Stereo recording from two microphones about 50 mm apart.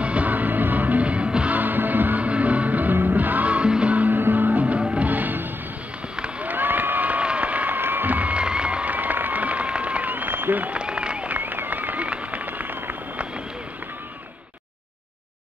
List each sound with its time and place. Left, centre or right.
0.0 s music: right
1.6 s music: right
2.2 s music: right
6.4 s crowd: right
10.1 s applause: right
10.8 s applause: centre
11.3 s a sound: right